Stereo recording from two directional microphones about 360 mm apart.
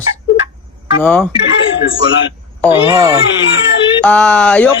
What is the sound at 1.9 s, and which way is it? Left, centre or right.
Speech, left.